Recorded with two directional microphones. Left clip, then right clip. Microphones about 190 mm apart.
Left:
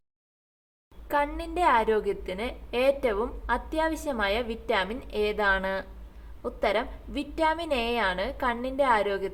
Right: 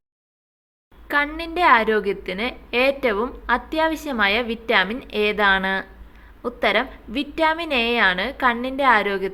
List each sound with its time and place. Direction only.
1.0 s a woman's voice: 25° right (ahead or behind)